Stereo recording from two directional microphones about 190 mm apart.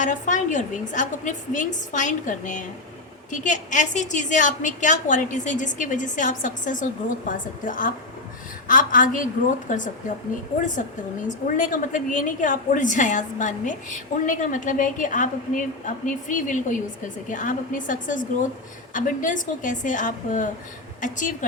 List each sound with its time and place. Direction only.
0.0 s a woman's voice: 40° left (ahead or behind)
11.3 s a woman's voice: 45° left (ahead or behind)